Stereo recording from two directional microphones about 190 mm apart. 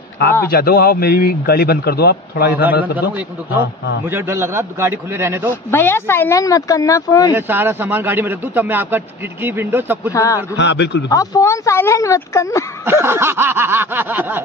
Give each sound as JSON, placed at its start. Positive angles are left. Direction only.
{"t": 0.5, "sound": "a man's voice", "side_deg": 55}
{"t": 4.0, "sound": "a man's voice", "side_deg": -10}
{"t": 5.5, "sound": "speech", "side_deg": 10}
{"t": 7.3, "sound": "a man's voice", "side_deg": -10}
{"t": 10.1, "sound": "speech", "side_deg": 15}
{"t": 10.6, "sound": "speech", "side_deg": 65}
{"t": 11.1, "sound": "speech", "side_deg": 20}
{"t": 12.8, "sound": "a man's voice", "side_deg": -10}